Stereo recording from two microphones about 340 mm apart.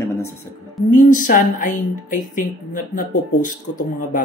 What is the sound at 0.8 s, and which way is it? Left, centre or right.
Speech, left.